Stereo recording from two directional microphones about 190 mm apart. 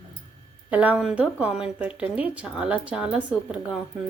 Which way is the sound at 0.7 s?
10° right (ahead or behind).